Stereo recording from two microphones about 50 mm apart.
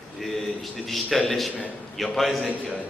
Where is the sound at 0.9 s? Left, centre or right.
Centre.